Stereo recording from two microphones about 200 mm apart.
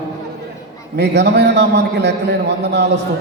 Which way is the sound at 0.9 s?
55° right (ahead or behind).